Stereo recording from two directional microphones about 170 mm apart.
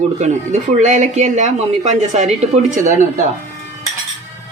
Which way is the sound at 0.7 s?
45° right (ahead or behind).